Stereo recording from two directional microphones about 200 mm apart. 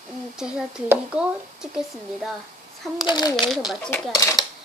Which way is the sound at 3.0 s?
20° left (ahead or behind).